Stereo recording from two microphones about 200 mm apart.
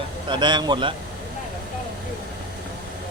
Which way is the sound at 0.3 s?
20° right (ahead or behind).